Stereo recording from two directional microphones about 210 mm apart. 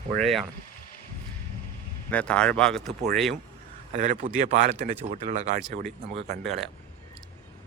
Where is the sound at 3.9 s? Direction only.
35° right (ahead or behind).